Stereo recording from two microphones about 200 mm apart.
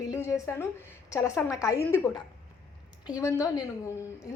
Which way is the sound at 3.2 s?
15° left (ahead or behind).